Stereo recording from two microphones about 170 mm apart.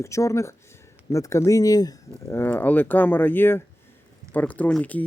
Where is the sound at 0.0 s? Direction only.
20° left (ahead or behind).